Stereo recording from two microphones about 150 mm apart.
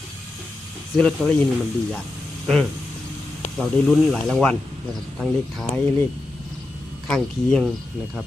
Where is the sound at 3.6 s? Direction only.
5° left (ahead or behind).